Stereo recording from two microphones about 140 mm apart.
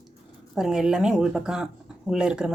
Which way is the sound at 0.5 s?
5° right (ahead or behind).